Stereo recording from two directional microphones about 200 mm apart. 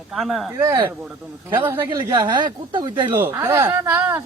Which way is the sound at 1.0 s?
10° right (ahead or behind).